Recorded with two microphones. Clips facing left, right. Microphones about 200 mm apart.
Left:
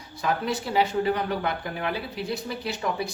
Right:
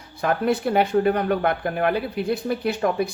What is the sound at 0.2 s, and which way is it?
Speech, 55° right (ahead or behind).